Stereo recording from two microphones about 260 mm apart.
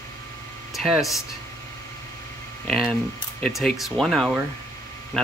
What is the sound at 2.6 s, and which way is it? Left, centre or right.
Speech, centre.